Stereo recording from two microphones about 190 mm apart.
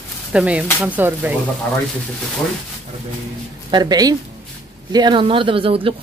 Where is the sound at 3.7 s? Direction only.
20° right (ahead or behind).